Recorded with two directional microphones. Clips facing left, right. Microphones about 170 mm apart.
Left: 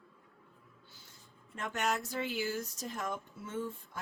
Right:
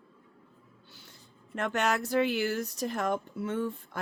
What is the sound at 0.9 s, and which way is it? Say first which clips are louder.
Speech: right 5 dB; 70° right (ahead or behind).